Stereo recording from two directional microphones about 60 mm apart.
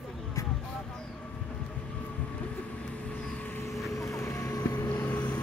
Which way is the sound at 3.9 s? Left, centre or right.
Left.